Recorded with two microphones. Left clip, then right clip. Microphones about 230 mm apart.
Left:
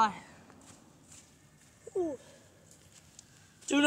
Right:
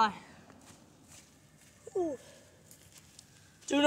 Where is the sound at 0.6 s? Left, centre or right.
Right.